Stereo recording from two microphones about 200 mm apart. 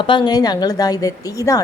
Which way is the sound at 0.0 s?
25° left (ahead or behind).